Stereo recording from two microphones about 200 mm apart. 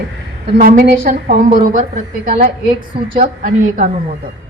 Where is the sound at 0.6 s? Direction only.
45° right (ahead or behind).